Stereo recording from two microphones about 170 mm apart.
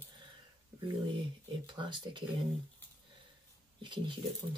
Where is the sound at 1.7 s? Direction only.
30° right (ahead or behind).